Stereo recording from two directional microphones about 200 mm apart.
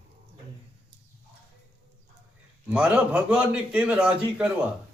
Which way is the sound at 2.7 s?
5° right (ahead or behind).